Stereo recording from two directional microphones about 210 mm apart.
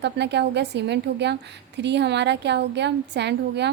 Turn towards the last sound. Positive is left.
turn(degrees=-55)  # may be behind; listen again after turning